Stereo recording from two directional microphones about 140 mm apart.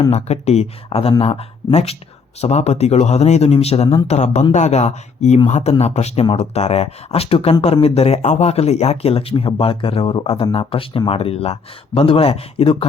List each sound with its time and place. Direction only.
0.1 s speech: 50° left (ahead or behind)